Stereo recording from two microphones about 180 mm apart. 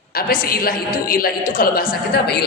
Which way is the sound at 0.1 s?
55° left (ahead or behind).